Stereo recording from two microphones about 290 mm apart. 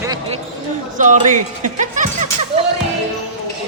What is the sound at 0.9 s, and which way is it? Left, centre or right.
Speech, right.